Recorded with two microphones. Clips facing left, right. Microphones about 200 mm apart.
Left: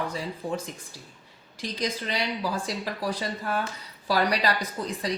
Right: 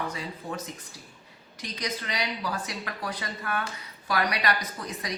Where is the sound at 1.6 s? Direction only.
30° left (ahead or behind).